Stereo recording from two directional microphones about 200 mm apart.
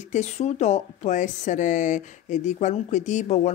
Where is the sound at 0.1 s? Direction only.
35° left (ahead or behind).